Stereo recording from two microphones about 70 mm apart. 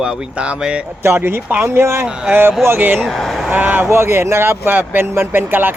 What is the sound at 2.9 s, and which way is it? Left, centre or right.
Speech, centre.